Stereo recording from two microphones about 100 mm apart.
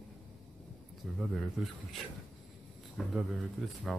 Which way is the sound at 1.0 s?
Centre (ahead or behind).